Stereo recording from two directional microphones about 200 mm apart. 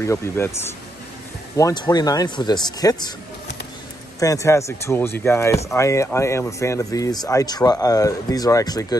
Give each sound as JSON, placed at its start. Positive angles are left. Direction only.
{"t": 0.0, "sound": "speech", "side_deg": 15}
{"t": 1.6, "sound": "speech", "side_deg": 20}
{"t": 4.2, "sound": "speech", "side_deg": 15}